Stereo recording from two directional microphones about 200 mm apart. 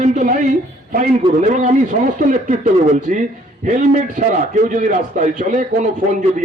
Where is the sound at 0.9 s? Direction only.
40° right (ahead or behind).